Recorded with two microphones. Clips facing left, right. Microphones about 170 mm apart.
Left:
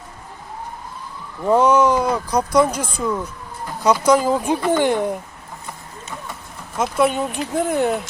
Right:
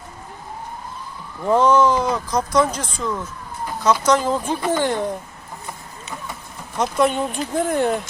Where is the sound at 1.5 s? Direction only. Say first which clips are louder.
Left 1 dB; 10° left (ahead or behind).